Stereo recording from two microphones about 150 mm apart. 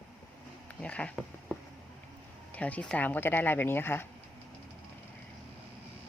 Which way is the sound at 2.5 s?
10° left (ahead or behind).